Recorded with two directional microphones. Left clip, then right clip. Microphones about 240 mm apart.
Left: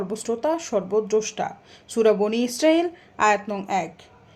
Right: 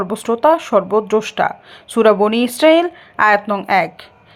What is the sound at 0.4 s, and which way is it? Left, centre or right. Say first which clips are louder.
A woman's voice: right 13 dB; centre.